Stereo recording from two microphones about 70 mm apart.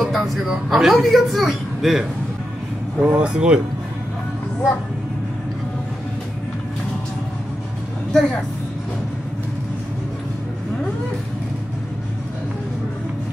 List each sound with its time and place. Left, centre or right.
0.0 s speech: centre
3.0 s speech: centre
8.1 s a woman's voice: centre